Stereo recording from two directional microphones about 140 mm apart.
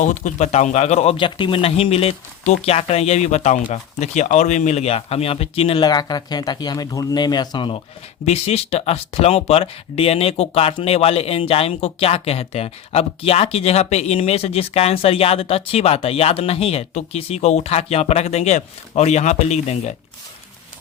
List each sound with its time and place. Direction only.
0.0 s a man's voice: 60° left (ahead or behind)
1.1 s speech: 35° left (ahead or behind)
8.2 s speech: 50° left (ahead or behind)